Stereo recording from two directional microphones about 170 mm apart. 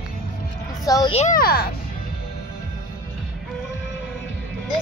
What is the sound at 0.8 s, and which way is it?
Speech, 20° left (ahead or behind).